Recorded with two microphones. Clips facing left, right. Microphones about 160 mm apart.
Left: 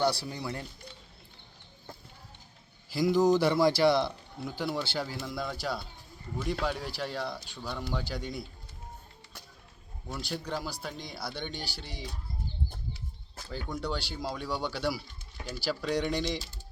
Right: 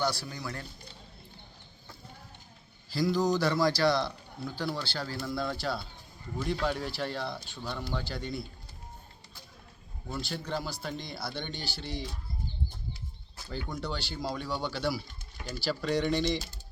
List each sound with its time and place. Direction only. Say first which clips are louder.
0.0 s speech: left 3 dB; 30° left (ahead or behind)
2.9 s speech: left 3 dB; 20° left (ahead or behind)
10.1 s speech: even; 10° left (ahead or behind)
13.5 s speech: left 1 dB; 10° left (ahead or behind)